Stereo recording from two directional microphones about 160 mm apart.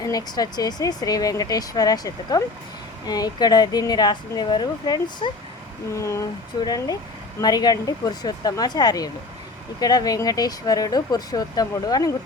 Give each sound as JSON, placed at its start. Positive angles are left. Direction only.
{"t": 0.0, "sound": "speech", "side_deg": 25}